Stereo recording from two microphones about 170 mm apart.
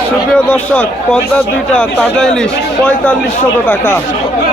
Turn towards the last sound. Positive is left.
turn(degrees=15)  # may be behind; listen again after turning